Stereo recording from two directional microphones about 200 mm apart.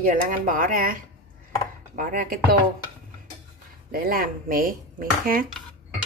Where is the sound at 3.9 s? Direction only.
45° right (ahead or behind).